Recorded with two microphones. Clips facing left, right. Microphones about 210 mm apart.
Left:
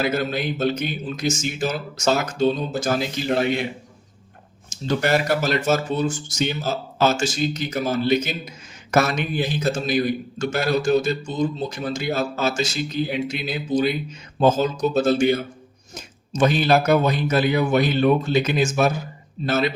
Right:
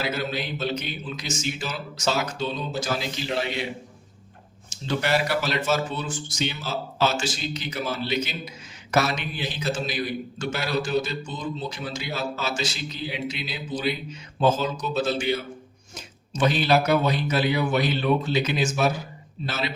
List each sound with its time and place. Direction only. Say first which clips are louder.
0.0 s a man's voice: left 5 dB; 50° left (ahead or behind)
4.9 s a man's voice: left 4 dB; 45° left (ahead or behind)